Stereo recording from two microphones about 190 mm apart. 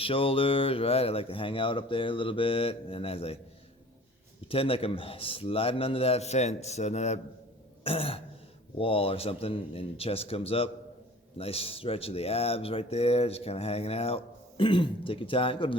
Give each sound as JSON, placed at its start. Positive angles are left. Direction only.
{"t": 0.0, "sound": "speech", "side_deg": 30}
{"t": 4.4, "sound": "speech", "side_deg": 30}